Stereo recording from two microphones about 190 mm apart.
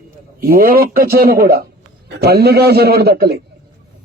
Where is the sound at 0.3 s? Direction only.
50° right (ahead or behind).